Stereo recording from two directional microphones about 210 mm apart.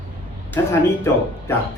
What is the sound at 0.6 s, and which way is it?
Speech, 15° left (ahead or behind).